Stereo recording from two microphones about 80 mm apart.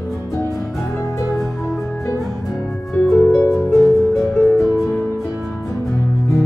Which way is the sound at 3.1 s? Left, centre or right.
Left.